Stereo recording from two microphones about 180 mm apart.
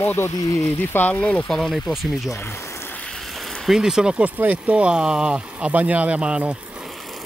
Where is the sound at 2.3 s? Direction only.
10° left (ahead or behind).